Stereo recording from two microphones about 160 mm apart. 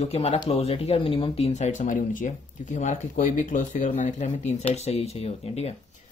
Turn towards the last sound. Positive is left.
turn(degrees=40)  # may be behind; listen again after turning